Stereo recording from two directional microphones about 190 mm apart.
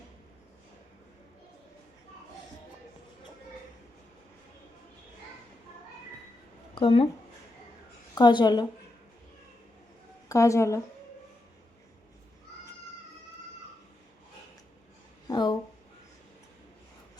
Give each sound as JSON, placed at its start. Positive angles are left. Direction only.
{"t": 6.7, "sound": "speech", "side_deg": 30}
{"t": 8.1, "sound": "speech", "side_deg": 25}
{"t": 10.2, "sound": "a woman's voice", "side_deg": 15}
{"t": 15.3, "sound": "a sound", "side_deg": 20}